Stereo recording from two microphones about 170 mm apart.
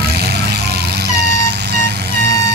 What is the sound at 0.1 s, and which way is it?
Vehicle, 70° right (ahead or behind).